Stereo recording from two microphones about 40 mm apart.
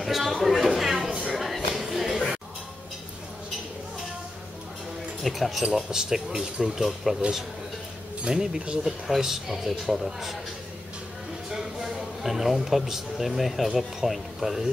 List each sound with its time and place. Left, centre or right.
0.0 s a sound: centre
5.2 s speech: centre
8.2 s speech: right
8.8 s speech: centre
11.5 s speech: centre